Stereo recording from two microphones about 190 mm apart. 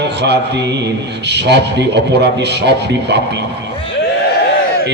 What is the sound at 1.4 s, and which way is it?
A man's voice, 65° right (ahead or behind).